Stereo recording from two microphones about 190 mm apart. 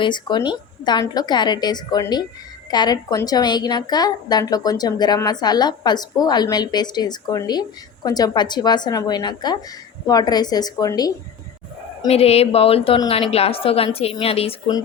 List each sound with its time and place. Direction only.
0.0 s a woman's voice: 25° left (ahead or behind)
12.0 s a woman's voice: 30° left (ahead or behind)